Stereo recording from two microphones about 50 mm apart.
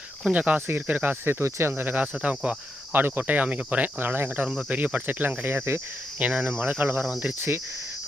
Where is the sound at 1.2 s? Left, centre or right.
Right.